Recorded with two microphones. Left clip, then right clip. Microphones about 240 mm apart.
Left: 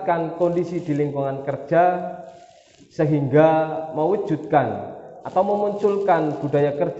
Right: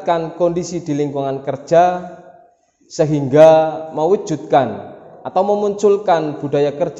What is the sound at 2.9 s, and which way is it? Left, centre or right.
A man's voice, right.